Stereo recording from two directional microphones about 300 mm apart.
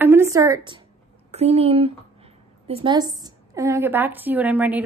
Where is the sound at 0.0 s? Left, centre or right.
Centre.